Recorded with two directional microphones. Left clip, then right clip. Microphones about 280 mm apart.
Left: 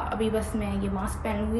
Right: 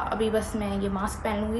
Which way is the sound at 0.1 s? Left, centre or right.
Centre.